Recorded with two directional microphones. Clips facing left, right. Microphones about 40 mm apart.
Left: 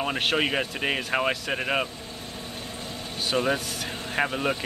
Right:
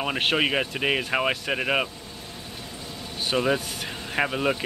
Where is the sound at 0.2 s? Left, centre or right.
Centre.